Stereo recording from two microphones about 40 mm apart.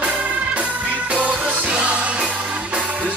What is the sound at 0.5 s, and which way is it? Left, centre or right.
Music, right.